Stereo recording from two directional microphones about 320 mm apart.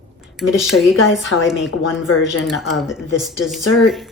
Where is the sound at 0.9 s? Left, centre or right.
Left.